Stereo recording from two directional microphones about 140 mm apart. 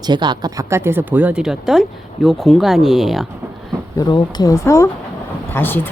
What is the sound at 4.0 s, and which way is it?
Speech, 30° left (ahead or behind).